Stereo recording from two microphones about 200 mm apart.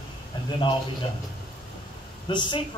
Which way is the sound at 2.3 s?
25° left (ahead or behind).